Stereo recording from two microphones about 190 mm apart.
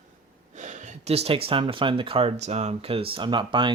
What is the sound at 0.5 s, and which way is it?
Speech, 40° right (ahead or behind).